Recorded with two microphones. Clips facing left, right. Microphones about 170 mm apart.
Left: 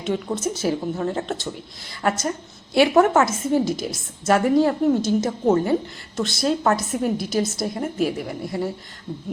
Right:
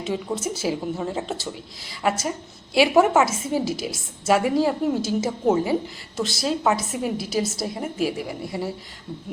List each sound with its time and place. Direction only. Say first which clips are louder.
0.1 s a woman's voice: left 3 dB; 5° right (ahead or behind)